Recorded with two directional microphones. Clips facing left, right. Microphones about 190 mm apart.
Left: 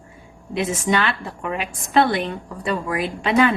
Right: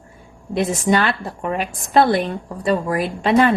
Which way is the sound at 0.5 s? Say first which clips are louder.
Right 3 dB; 40° right (ahead or behind).